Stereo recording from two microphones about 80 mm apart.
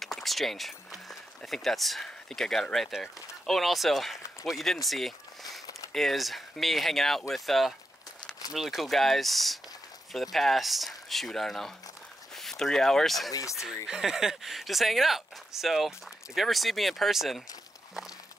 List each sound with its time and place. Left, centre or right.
0.0 s speech: centre
4.8 s a sound: centre
5.9 s speech: centre
13.3 s speech: left
13.8 s speech: centre